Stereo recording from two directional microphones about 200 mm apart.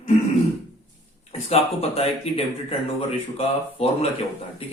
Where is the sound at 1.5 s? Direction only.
30° left (ahead or behind).